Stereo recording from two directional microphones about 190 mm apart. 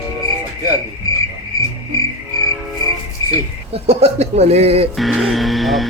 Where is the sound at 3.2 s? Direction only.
20° left (ahead or behind).